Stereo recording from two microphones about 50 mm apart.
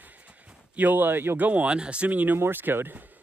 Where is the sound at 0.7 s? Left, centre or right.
Right.